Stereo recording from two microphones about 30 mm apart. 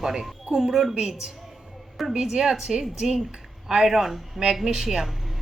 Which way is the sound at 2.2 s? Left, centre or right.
Centre.